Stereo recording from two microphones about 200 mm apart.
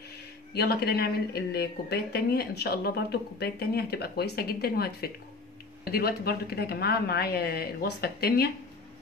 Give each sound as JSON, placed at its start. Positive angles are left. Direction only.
{"t": 0.6, "sound": "speech", "side_deg": 55}